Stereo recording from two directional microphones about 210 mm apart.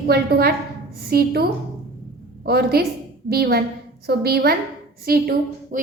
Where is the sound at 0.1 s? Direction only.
50° right (ahead or behind).